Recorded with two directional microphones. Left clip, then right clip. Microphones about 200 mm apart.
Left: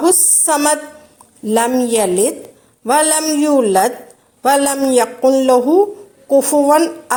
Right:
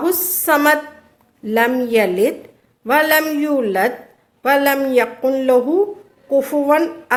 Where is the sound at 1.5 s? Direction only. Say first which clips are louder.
Left 2 dB; 30° left (ahead or behind).